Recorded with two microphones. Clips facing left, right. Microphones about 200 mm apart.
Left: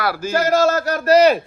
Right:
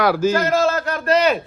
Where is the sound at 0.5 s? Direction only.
50° left (ahead or behind).